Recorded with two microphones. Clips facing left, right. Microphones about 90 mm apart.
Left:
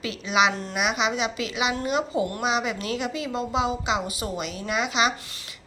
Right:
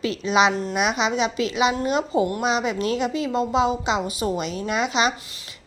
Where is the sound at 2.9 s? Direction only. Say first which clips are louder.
Right 5 dB; 15° left (ahead or behind).